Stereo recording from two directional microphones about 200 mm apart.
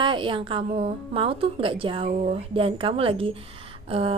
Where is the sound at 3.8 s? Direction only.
30° right (ahead or behind).